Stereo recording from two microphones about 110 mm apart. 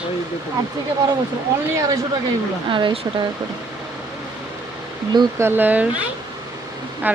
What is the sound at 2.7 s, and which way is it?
Speech, 45° right (ahead or behind).